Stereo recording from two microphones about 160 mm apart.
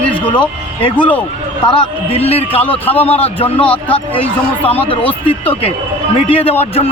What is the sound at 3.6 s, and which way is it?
Speech, 10° left (ahead or behind).